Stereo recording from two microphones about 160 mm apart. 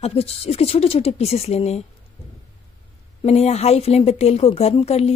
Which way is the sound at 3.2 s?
40° left (ahead or behind).